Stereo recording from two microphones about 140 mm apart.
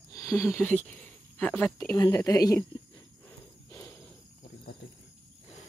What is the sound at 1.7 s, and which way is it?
Speech, 25° left (ahead or behind).